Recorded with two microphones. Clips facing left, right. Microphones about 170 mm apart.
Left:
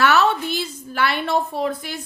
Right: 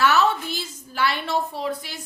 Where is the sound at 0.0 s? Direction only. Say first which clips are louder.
Left 2 dB; 65° left (ahead or behind).